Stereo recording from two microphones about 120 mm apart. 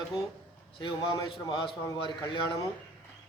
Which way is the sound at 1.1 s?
40° left (ahead or behind).